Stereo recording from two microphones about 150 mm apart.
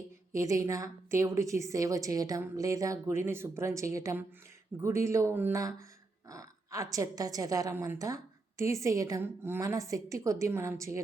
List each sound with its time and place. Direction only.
0.3 s a woman's voice: 20° right (ahead or behind)